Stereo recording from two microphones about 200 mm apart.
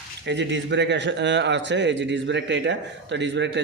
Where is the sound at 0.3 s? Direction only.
60° right (ahead or behind).